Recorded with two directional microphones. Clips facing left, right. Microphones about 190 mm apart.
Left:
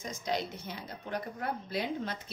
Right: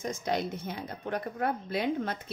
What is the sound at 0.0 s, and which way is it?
Speech, 55° right (ahead or behind).